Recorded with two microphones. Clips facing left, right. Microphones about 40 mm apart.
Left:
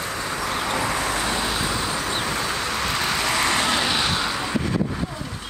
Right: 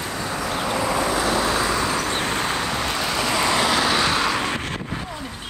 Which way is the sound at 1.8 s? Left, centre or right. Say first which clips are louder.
Right 3 dB; right.